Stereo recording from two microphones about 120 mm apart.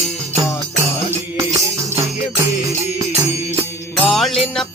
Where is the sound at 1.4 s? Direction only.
25° right (ahead or behind).